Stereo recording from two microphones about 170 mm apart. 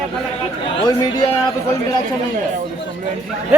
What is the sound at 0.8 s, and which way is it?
Speech, 25° left (ahead or behind).